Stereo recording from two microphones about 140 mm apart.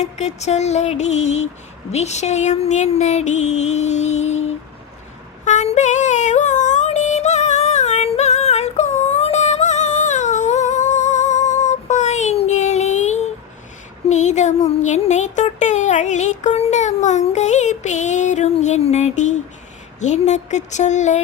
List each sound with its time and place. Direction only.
0.0 s music: 55° left (ahead or behind)
14.1 s a sound: 55° left (ahead or behind)
20.0 s speech: 55° left (ahead or behind)